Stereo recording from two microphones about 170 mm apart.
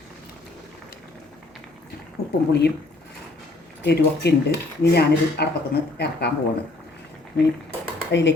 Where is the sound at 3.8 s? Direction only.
80° left.